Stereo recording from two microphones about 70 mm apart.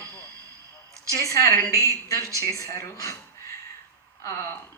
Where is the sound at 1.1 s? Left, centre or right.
Left.